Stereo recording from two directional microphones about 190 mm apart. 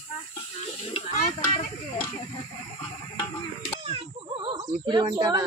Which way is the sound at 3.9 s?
25° right (ahead or behind).